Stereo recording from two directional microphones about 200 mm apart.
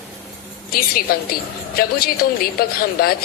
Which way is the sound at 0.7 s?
45° left (ahead or behind).